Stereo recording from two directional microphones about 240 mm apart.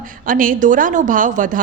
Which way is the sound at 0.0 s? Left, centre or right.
Right.